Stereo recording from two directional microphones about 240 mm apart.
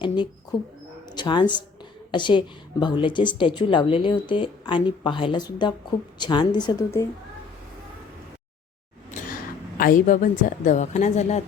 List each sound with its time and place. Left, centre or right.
0.5 s a woman's voice: left
9.7 s a woman's voice: left